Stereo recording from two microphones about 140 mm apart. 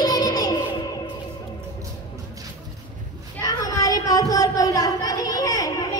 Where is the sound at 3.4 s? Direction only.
25° left (ahead or behind).